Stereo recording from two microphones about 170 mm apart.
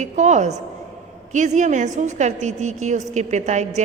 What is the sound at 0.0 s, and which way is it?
A woman's voice, 45° right (ahead or behind).